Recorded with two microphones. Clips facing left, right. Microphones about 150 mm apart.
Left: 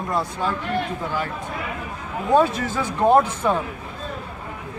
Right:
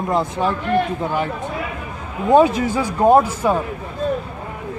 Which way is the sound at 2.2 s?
15° right (ahead or behind).